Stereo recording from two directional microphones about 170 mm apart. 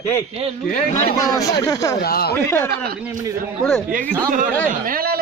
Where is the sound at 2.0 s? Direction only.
65° left (ahead or behind).